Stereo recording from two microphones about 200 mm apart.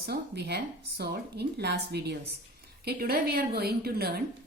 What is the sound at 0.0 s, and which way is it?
A woman's voice, 55° right (ahead or behind).